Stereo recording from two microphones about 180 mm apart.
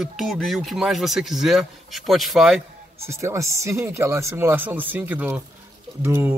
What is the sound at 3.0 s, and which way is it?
A man's voice, 15° right (ahead or behind).